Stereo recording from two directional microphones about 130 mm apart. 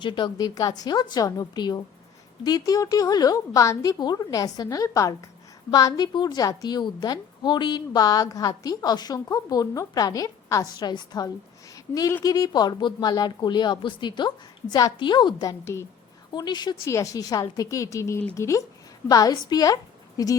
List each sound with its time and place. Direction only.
0.0 s a woman's voice: 40° left (ahead or behind); by 15.9 s 20° left (ahead or behind)
16.3 s a woman's voice: 35° left (ahead or behind)